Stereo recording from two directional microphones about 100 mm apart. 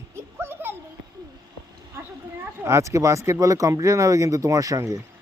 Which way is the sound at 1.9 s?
25° right (ahead or behind).